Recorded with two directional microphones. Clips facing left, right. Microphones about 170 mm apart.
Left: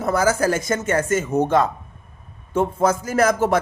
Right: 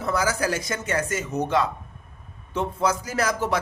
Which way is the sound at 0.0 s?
50° left (ahead or behind).